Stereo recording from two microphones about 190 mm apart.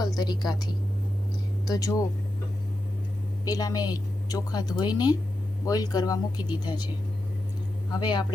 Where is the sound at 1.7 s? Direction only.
20° left (ahead or behind).